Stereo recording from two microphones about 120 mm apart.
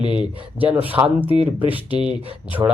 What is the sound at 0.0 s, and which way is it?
Speech, 40° left (ahead or behind).